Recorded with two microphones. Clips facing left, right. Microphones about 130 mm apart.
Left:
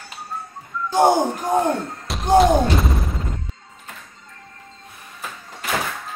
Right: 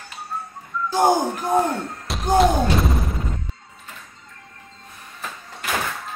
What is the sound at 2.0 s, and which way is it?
Thump, centre (ahead or behind).